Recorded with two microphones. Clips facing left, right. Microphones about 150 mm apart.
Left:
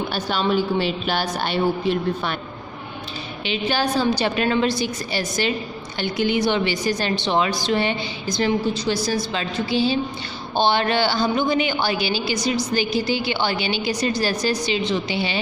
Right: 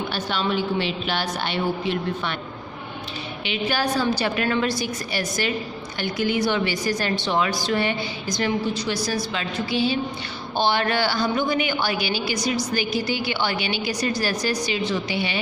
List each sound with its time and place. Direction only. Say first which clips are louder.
0.1 s a woman's voice: left 4 dB; 40° left (ahead or behind)
3.4 s a woman's voice: left 2 dB; 25° left (ahead or behind)